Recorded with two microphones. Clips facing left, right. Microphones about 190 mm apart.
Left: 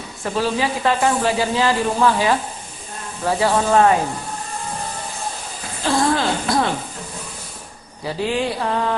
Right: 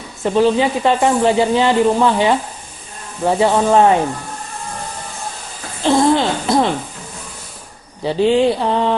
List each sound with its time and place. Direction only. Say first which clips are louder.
0.2 s speech: right 7 dB; 20° right (ahead or behind)
5.8 s a sound: right 5 dB; 25° right (ahead or behind)
8.0 s speech: right 8 dB; 25° right (ahead or behind)